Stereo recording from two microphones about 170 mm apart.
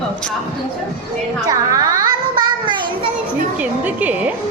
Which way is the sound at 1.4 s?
20° right (ahead or behind).